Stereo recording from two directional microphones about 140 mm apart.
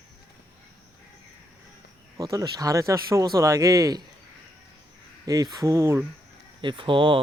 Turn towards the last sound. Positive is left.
turn(degrees=-35)  # may be behind; listen again after turning